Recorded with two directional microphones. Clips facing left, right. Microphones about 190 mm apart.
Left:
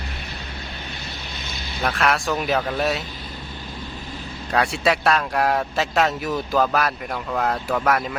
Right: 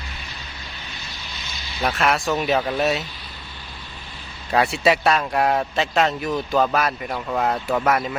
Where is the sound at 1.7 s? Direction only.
Centre (ahead or behind).